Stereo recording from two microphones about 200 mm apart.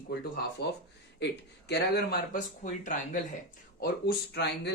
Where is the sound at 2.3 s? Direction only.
40° left (ahead or behind).